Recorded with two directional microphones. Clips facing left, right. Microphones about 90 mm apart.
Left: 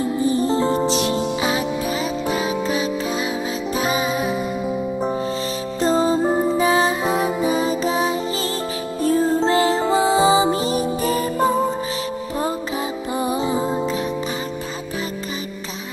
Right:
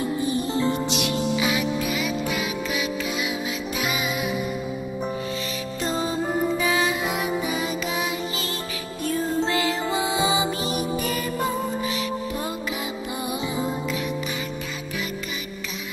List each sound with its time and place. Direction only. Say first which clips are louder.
0.3 s music: left 6 dB; 35° left (ahead or behind)
5.8 s music: left 9 dB; 35° left (ahead or behind)
13.2 s music: left 6 dB; 35° left (ahead or behind)